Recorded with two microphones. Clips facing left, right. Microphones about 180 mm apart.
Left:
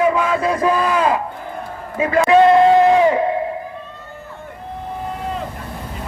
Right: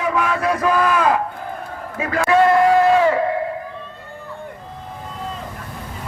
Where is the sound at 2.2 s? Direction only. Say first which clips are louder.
Left 3 dB; 20° left (ahead or behind).